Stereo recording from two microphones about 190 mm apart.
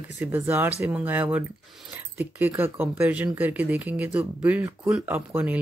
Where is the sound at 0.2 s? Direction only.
10° right (ahead or behind).